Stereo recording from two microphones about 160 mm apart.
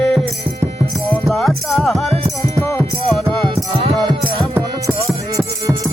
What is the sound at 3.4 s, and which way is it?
Music, 40° right (ahead or behind).